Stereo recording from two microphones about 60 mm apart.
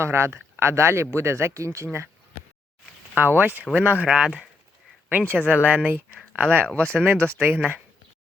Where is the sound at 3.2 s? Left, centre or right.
Right.